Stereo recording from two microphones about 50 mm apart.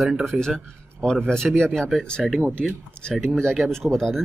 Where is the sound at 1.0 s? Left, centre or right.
Centre.